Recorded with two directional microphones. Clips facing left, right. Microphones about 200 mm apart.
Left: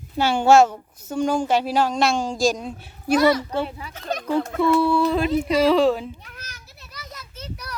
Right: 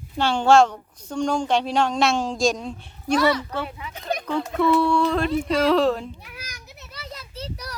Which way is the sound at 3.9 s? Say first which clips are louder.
Even; 15° right (ahead or behind).